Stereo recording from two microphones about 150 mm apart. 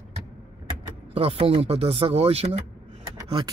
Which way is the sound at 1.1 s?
40° right (ahead or behind).